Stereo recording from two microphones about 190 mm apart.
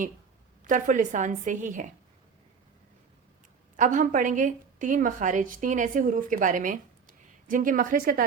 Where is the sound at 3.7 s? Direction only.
45° right (ahead or behind).